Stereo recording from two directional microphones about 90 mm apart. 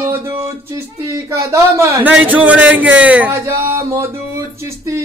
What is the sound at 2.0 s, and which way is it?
Speech, 15° right (ahead or behind).